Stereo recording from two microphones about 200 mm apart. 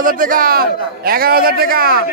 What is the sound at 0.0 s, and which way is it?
A man's voice, 45° right (ahead or behind).